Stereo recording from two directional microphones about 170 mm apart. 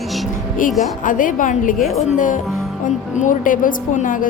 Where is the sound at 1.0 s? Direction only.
50° left (ahead or behind).